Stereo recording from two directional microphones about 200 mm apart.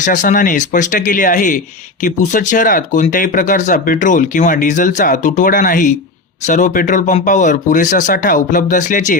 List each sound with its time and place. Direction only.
0.0 s speech: 40° left (ahead or behind)